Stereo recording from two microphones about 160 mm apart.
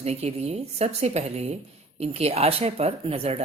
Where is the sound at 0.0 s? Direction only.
40° right (ahead or behind).